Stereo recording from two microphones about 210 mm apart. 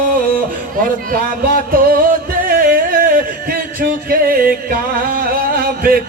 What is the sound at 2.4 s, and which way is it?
Music, 45° right (ahead or behind).